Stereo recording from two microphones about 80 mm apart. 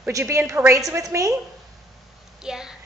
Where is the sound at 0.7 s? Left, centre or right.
Right.